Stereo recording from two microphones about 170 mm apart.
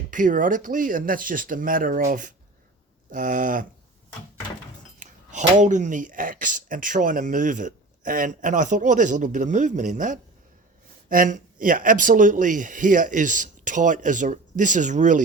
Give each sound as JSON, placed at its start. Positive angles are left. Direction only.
{"t": 0.1, "sound": "speech", "side_deg": -50}
{"t": 4.9, "sound": "speech", "side_deg": -45}